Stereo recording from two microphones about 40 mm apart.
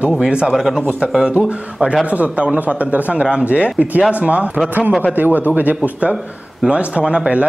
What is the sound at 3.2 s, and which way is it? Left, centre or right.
Speech, right.